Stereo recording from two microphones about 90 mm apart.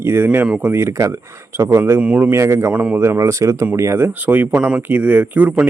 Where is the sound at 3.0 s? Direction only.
30° right (ahead or behind).